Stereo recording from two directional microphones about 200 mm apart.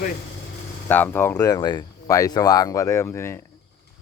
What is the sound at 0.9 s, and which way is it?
Speech, 10° left (ahead or behind).